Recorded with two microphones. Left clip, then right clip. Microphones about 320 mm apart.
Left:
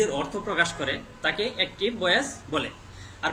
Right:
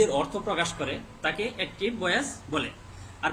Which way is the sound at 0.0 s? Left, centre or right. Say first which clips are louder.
Right 2 dB; centre.